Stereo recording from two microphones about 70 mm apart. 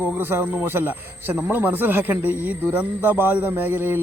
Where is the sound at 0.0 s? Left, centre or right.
Right.